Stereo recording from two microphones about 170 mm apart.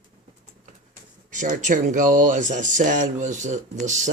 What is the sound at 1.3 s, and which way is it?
Speech, 45° right (ahead or behind).